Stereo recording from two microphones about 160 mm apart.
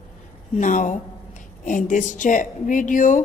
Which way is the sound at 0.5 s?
50° left (ahead or behind).